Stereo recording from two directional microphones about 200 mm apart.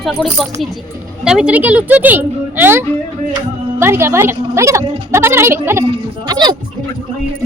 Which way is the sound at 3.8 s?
10° right (ahead or behind).